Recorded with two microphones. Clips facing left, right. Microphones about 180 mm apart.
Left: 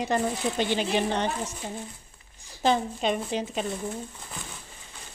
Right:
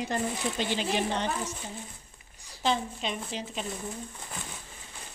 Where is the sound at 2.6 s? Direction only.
50° left (ahead or behind).